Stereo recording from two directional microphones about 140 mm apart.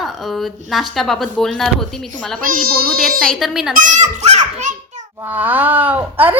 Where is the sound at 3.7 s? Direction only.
60° right (ahead or behind).